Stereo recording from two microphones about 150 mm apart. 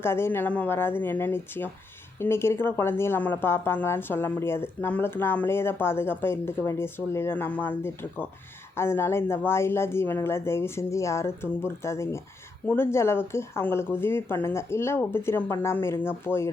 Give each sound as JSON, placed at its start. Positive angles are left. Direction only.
{"t": 0.0, "sound": "speech", "side_deg": 15}